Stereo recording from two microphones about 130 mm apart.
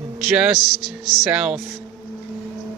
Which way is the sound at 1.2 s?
10° right (ahead or behind).